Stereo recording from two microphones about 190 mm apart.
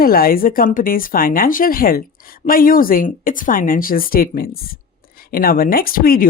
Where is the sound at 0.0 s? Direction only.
50° left (ahead or behind).